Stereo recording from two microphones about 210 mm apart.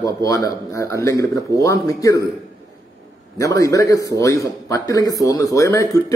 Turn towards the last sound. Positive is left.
turn(degrees=15)  # may be behind; listen again after turning